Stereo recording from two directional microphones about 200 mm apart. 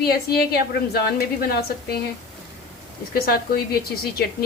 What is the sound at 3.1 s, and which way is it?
Speech, 50° left (ahead or behind).